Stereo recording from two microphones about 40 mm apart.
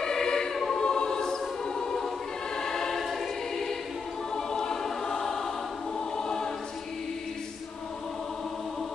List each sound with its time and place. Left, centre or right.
0.0 s choir: centre
0.7 s music: centre
2.5 s choir: centre